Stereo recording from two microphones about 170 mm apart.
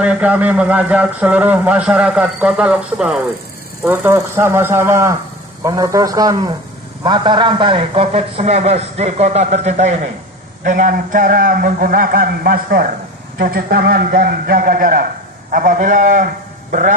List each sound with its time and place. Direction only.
0.0 s a man's voice: 10° right (ahead or behind); by 16.3 s 50° right (ahead or behind)